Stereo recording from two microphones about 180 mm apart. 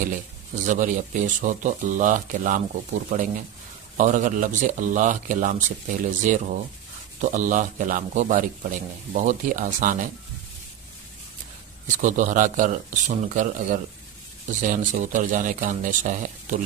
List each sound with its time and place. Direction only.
0.5 s a man's voice: 45° right (ahead or behind)
12.0 s a man's voice: 45° right (ahead or behind)